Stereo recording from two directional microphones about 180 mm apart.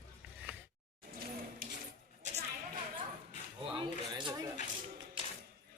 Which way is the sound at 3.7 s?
25° right (ahead or behind).